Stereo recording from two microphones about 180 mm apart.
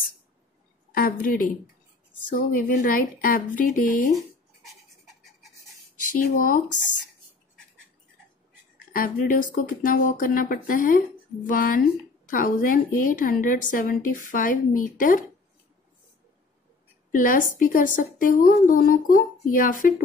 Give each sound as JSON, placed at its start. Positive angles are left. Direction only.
{"t": 0.9, "sound": "a woman's voice", "side_deg": 55}
{"t": 4.6, "sound": "beatboxing", "side_deg": 0}
{"t": 6.1, "sound": "a woman's voice", "side_deg": 50}
{"t": 8.9, "sound": "a woman's voice", "side_deg": 50}
{"t": 17.1, "sound": "a woman's voice", "side_deg": 50}